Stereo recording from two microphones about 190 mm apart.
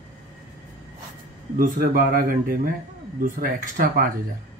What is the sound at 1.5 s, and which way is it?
Speech, 50° right (ahead or behind).